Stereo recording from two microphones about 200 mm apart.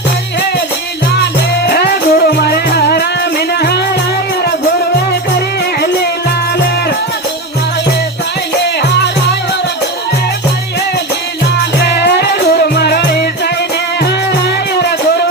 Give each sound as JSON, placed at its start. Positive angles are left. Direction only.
{"t": 1.6, "sound": "music", "side_deg": 50}
{"t": 11.8, "sound": "music", "side_deg": 55}